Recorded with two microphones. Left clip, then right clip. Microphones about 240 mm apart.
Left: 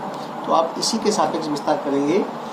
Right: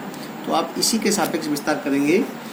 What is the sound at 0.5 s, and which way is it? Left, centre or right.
Speech, right.